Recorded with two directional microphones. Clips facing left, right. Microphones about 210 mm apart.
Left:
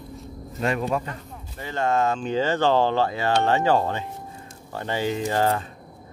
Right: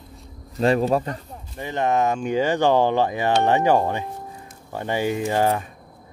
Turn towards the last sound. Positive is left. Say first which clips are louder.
# right 2 dB
turn(degrees=-15)  # may be behind; listen again after turning